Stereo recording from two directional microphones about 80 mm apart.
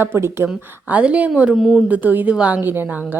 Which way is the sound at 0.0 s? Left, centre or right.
Right.